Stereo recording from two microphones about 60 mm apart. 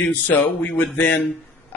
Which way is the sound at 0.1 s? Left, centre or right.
Left.